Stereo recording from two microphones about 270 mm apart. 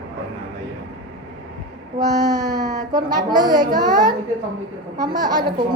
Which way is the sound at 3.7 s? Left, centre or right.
Centre.